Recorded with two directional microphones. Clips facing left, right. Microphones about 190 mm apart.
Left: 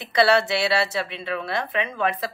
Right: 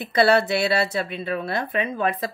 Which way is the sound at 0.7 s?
50° right (ahead or behind).